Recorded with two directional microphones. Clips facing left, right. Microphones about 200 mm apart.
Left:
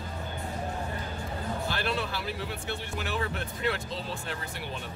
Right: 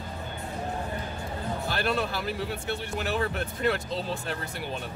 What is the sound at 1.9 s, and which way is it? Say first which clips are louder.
Speech: right 3 dB; 45° right (ahead or behind).